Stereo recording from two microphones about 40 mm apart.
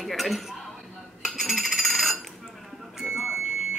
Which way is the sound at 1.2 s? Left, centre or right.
Centre.